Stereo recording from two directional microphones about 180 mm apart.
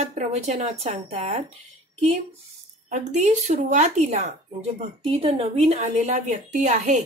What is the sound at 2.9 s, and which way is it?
A woman's voice, 45° right (ahead or behind).